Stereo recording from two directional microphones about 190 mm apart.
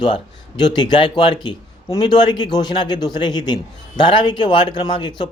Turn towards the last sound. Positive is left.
turn(degrees=25)  # may be behind; listen again after turning